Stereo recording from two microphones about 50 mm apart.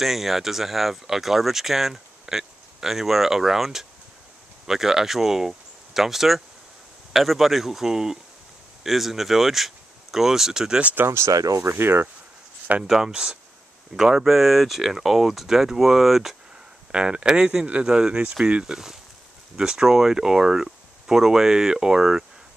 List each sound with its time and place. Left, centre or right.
0.0 s speech: centre
11.1 s speech: right
11.8 s speech: right
12.8 s speech: centre
13.1 s speech: centre
16.9 s speech: centre